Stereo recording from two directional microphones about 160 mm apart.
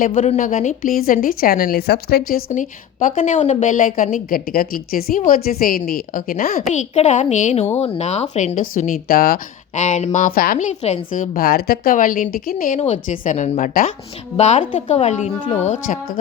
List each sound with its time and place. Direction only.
0.2 s a woman's voice: 55° left (ahead or behind); by 2.4 s 75° left (ahead or behind)
2.5 s a woman's voice: 55° left (ahead or behind)
6.6 s speech: 45° left (ahead or behind); by 9.8 s 70° left (ahead or behind)
9.8 s a woman's voice: 45° left (ahead or behind)
12.8 s speech: 50° left (ahead or behind)